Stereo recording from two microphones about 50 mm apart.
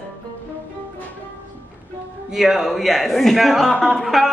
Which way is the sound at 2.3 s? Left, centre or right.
Centre.